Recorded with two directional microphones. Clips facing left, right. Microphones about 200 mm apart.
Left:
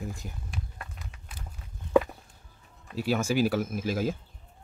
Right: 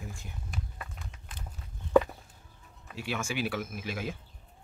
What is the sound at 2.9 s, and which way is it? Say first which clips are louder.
Speech: left 8 dB; 35° left (ahead or behind).